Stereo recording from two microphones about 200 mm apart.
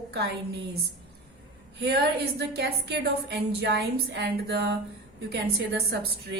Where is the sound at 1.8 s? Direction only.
55° right (ahead or behind).